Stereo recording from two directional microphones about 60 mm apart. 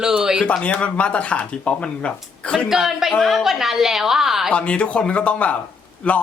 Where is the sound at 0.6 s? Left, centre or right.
Left.